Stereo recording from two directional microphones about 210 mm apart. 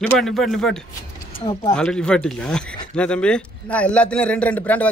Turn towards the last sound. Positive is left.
turn(degrees=5)  # may be behind; listen again after turning